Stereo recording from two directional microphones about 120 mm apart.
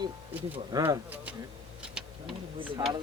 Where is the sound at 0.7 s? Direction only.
30° right (ahead or behind).